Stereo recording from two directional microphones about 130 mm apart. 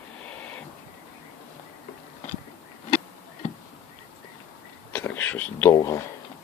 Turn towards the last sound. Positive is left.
turn(degrees=25)  # may be behind; listen again after turning